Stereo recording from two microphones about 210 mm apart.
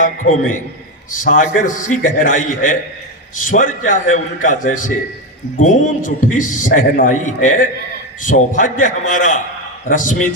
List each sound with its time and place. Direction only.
0.0 s a man's voice: 40° left (ahead or behind)